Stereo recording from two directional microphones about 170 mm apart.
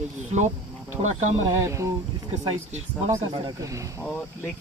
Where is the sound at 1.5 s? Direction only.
20° right (ahead or behind).